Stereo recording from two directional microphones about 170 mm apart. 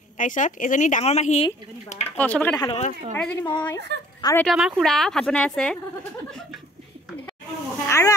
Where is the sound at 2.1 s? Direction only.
10° left (ahead or behind).